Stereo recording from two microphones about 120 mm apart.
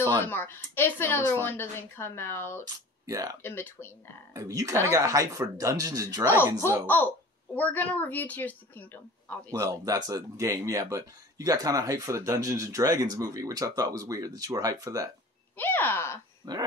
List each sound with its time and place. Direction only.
0.2 s speech: 20° left (ahead or behind)
2.6 s speech: 30° right (ahead or behind)
3.4 s speech: 20° left (ahead or behind)
4.3 s speech: 30° right (ahead or behind)
7.5 s a woman's voice: 15° left (ahead or behind)
9.5 s speech: 30° right (ahead or behind)
15.5 s a woman's voice: 15° left (ahead or behind)
16.4 s dog: 35° right (ahead or behind)